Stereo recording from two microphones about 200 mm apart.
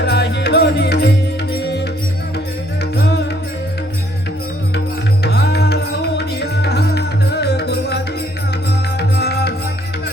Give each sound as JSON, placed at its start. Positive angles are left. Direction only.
{"t": 0.0, "sound": "music", "side_deg": 60}
{"t": 2.9, "sound": "music", "side_deg": 55}
{"t": 5.2, "sound": "music", "side_deg": 55}
{"t": 9.0, "sound": "music", "side_deg": 55}